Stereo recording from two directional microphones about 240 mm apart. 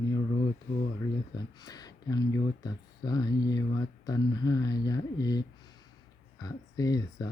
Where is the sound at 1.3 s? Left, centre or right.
Centre.